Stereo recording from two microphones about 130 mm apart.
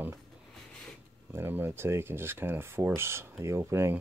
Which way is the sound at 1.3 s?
15° right (ahead or behind).